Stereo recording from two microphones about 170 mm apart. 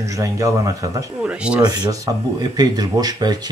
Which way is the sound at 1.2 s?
5° right (ahead or behind).